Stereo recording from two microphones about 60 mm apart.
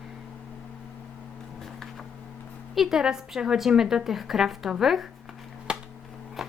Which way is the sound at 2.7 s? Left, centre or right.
Centre.